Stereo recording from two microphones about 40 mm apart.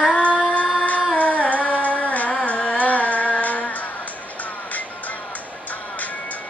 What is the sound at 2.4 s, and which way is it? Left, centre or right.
Music, left.